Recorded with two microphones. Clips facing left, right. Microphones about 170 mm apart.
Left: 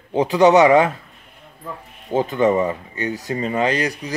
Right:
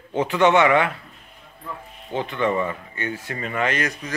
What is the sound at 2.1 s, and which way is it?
Speech, 40° left (ahead or behind).